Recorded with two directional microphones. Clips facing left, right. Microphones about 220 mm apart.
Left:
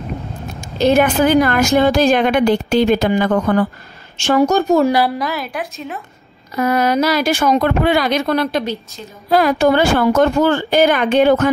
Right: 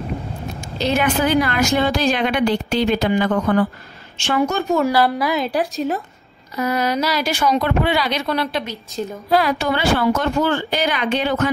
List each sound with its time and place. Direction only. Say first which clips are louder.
0.7 s a woman's voice: left 6 dB; 45° left (ahead or behind)
5.4 s speech: right 5 dB; 35° right (ahead or behind)
6.5 s a woman's voice: left 5 dB; 50° left (ahead or behind)